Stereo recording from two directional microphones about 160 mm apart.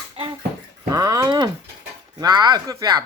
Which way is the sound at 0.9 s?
20° right (ahead or behind).